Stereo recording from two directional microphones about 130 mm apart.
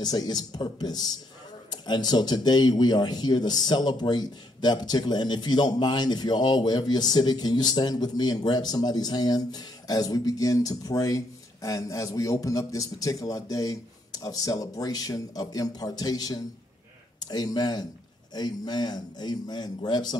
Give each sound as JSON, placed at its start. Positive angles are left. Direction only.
{"t": 0.0, "sound": "speech", "side_deg": 30}